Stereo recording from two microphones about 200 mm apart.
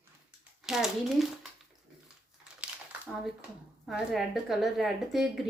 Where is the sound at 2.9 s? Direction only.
5° right (ahead or behind).